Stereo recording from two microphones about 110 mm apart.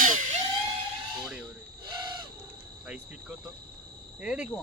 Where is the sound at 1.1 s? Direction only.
5° right (ahead or behind).